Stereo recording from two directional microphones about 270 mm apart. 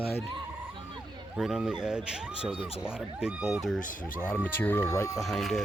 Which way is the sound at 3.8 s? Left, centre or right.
Left.